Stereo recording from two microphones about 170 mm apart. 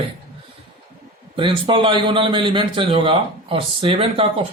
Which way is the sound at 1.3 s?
30° right (ahead or behind).